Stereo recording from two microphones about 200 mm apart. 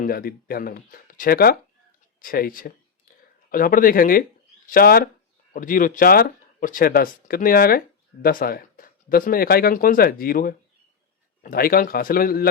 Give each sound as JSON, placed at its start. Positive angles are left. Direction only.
{"t": 0.0, "sound": "speech", "side_deg": 50}